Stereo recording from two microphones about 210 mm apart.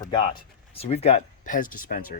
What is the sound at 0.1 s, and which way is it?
Speech, 25° left (ahead or behind).